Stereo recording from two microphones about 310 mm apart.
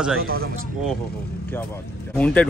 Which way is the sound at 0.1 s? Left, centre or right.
Right.